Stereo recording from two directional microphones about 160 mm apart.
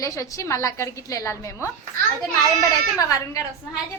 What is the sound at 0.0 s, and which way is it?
A woman's voice, 20° left (ahead or behind).